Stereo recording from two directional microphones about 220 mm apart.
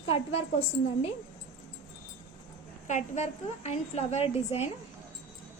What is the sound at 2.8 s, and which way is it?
A woman's voice, 35° left (ahead or behind).